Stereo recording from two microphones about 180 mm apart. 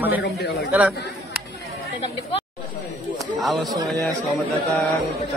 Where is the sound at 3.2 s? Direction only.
Centre (ahead or behind).